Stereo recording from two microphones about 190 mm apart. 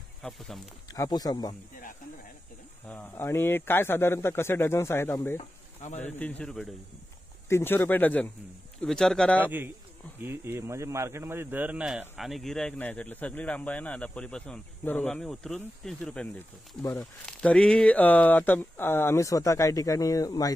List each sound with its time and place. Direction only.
0.2 s speech: centre (ahead or behind)
0.9 s speech: 20° left (ahead or behind)
2.9 s speech: 10° left (ahead or behind)
5.4 s a sound: 35° left (ahead or behind)
5.9 s speech: 10° left (ahead or behind)
9.4 s a man's voice: 10° right (ahead or behind); by 20.5 s 20° left (ahead or behind)